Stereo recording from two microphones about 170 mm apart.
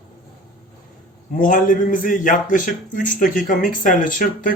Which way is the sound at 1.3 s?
50° left (ahead or behind).